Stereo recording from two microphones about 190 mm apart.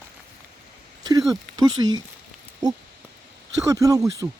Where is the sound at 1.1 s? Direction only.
20° right (ahead or behind).